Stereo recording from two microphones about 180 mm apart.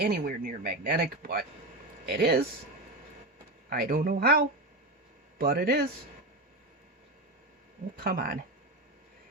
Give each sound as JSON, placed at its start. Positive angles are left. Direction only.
{"t": 0.0, "sound": "speech", "side_deg": -55}
{"t": 3.7, "sound": "speech", "side_deg": -55}
{"t": 7.9, "sound": "speech", "side_deg": -55}